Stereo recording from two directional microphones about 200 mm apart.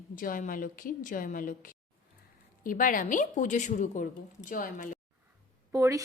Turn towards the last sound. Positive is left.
turn(degrees=-15)  # may be behind; listen again after turning